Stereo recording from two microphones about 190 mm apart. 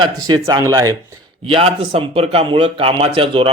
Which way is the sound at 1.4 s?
30° right (ahead or behind).